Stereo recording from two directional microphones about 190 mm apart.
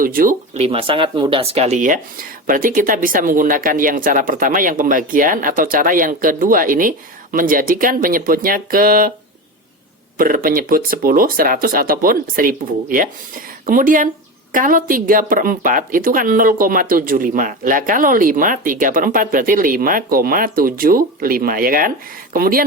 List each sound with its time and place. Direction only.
0.0 s speech: 45° right (ahead or behind)
10.2 s speech: 50° right (ahead or behind)